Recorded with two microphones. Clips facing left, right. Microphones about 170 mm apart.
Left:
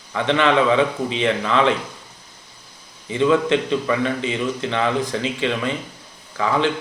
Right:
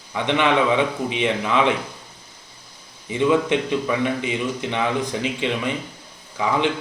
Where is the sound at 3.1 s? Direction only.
15° right (ahead or behind).